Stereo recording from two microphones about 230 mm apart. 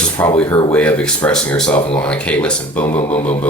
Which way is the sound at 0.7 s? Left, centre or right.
Centre.